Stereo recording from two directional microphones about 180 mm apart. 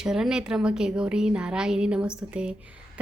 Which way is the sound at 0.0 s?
5° right (ahead or behind).